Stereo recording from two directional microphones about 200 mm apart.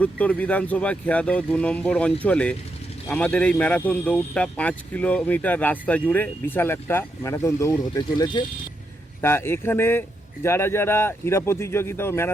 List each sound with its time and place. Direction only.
0.0 s speech: 5° left (ahead or behind)